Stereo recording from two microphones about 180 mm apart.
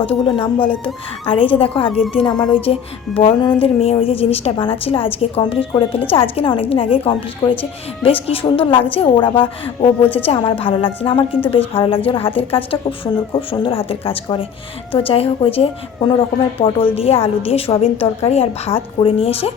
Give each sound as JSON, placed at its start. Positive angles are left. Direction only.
{"t": 0.0, "sound": "a woman's voice", "side_deg": 30}
{"t": 0.4, "sound": "speech", "side_deg": 10}
{"t": 1.2, "sound": "a woman's voice", "side_deg": 30}